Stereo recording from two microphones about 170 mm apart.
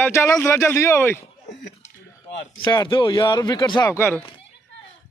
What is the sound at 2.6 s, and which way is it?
Speech, 25° left (ahead or behind).